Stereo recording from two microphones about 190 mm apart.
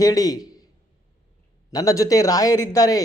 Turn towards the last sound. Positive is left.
turn(degrees=20)  # may be behind; listen again after turning